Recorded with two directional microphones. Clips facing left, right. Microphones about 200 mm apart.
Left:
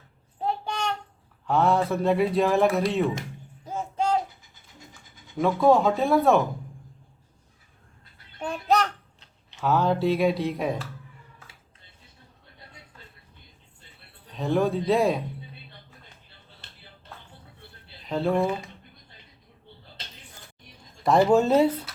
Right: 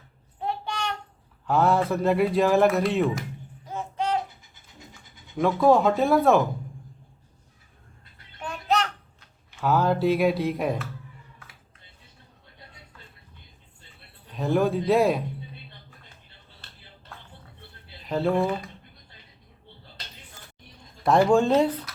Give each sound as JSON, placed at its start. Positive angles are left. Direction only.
{"t": 0.4, "sound": "child singing", "side_deg": 35}
{"t": 1.5, "sound": "a man's voice", "side_deg": 0}
{"t": 3.7, "sound": "a sound", "side_deg": 30}
{"t": 5.4, "sound": "a man's voice", "side_deg": 0}
{"t": 8.4, "sound": "bathtub", "side_deg": 30}
{"t": 9.6, "sound": "a man's voice", "side_deg": 0}
{"t": 14.3, "sound": "a man's voice", "side_deg": 0}
{"t": 18.0, "sound": "speech", "side_deg": 0}
{"t": 21.0, "sound": "a man's voice", "side_deg": 0}